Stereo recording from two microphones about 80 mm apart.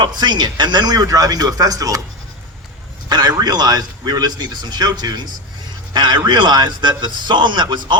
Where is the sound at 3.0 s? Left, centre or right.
Right.